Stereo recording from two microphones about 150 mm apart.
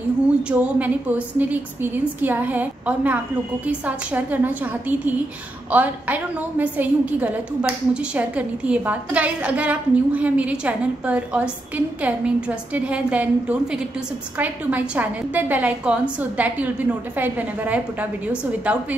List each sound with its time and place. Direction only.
0.5 s a woman's voice: 10° right (ahead or behind)